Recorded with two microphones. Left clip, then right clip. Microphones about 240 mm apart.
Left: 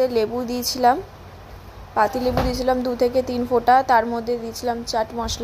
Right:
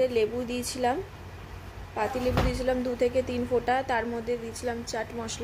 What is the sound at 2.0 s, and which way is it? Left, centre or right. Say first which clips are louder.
A woman's voice: left 8 dB; centre.